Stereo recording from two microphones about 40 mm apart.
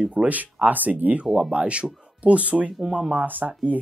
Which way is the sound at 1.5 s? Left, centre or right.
Right.